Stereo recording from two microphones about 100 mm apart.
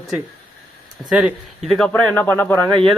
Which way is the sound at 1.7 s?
10° left (ahead or behind).